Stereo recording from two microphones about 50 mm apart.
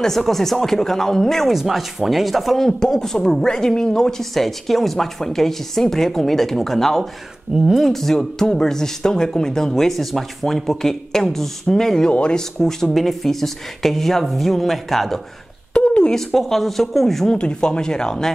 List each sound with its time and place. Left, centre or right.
0.0 s speech: centre
1.5 s speech: centre
7.5 s speech: centre
7.8 s speech: centre
12.1 s speech: left; by 15.1 s centre
15.7 s a sound: left
16.3 s speech: centre
17.3 s speech: centre